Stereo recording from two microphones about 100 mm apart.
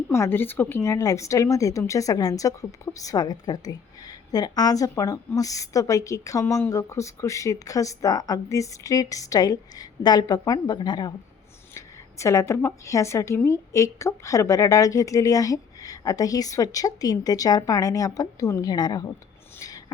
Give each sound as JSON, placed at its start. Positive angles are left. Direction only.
{"t": 0.1, "sound": "a woman's voice", "side_deg": 25}
{"t": 11.7, "sound": "a woman's voice", "side_deg": 30}
{"t": 19.5, "sound": "a sound", "side_deg": 35}